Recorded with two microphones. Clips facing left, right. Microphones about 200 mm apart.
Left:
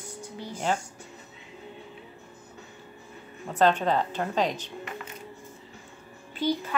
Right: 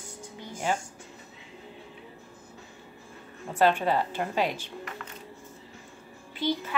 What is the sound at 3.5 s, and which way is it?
A woman's voice, 10° right (ahead or behind).